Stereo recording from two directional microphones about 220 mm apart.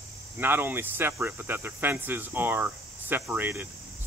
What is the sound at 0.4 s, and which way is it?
Speech, 10° right (ahead or behind).